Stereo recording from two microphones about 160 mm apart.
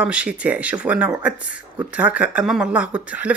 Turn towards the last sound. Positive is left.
turn(degrees=-10)  # may be behind; listen again after turning